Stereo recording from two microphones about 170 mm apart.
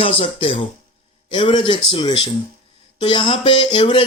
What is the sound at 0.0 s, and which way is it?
Speech, 30° left (ahead or behind).